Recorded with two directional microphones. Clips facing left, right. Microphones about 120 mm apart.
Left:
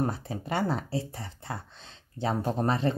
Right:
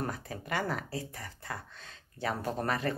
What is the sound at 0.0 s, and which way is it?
Speech, 30° left (ahead or behind).